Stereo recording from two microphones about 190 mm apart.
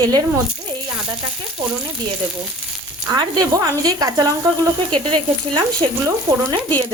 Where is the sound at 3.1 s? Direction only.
20° right (ahead or behind).